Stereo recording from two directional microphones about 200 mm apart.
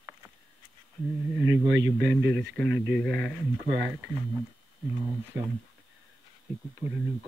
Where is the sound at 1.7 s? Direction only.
65° right (ahead or behind).